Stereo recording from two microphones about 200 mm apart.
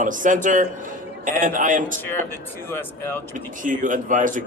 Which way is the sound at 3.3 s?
40° right (ahead or behind).